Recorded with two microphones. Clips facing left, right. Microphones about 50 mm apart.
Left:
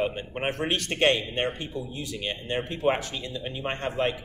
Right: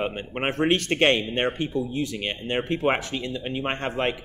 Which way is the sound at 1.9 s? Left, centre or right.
Right.